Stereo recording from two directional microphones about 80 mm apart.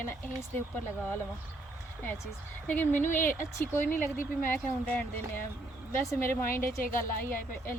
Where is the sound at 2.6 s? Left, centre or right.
Left.